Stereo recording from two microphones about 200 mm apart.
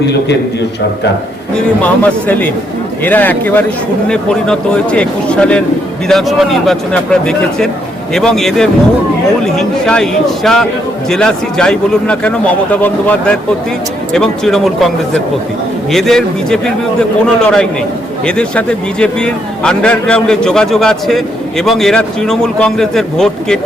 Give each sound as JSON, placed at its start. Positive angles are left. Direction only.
{"t": 0.0, "sound": "a man's voice", "side_deg": 60}
{"t": 1.5, "sound": "a man's voice", "side_deg": 5}